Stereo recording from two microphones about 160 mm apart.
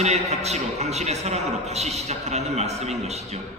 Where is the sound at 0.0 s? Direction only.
40° right (ahead or behind).